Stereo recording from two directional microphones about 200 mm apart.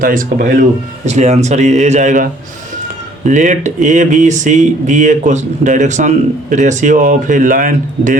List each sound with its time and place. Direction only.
0.0 s speech: 45° right (ahead or behind)